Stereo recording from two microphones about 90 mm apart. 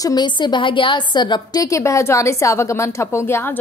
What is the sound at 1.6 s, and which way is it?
A woman's voice, 35° left (ahead or behind).